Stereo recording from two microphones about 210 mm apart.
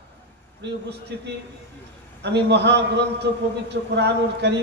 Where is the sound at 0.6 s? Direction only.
55° right (ahead or behind).